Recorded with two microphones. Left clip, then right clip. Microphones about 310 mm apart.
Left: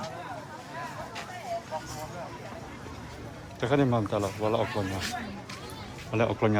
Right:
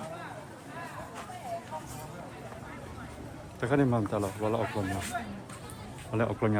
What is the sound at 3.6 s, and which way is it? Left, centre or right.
Speech, centre.